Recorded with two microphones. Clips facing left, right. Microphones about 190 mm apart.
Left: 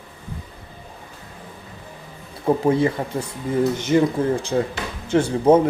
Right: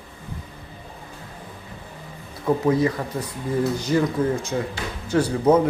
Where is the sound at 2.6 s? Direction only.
30° left (ahead or behind).